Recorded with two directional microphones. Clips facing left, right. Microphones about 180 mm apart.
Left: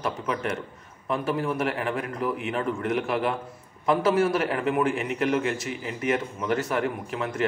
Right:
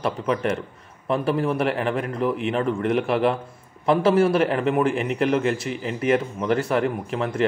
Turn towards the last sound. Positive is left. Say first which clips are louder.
# right 4 dB
turn(degrees=-30)  # may be behind; listen again after turning